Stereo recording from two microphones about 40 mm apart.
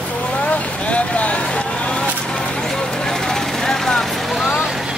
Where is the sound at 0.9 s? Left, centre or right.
Left.